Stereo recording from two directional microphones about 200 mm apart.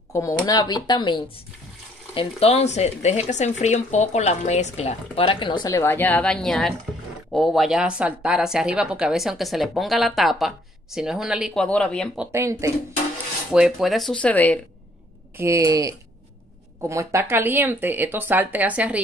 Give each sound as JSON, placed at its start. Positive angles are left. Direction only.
{"t": 0.1, "sound": "speech", "side_deg": 15}
{"t": 12.2, "sound": "speech", "side_deg": -15}
{"t": 13.5, "sound": "speech", "side_deg": 0}
{"t": 15.3, "sound": "speech", "side_deg": -15}